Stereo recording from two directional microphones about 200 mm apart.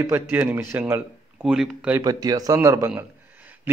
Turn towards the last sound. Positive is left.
turn(degrees=-15)  # may be behind; listen again after turning